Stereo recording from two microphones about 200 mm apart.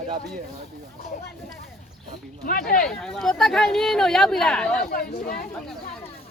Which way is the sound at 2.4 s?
45° left (ahead or behind).